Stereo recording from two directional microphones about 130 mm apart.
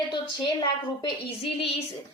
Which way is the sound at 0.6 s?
40° left (ahead or behind).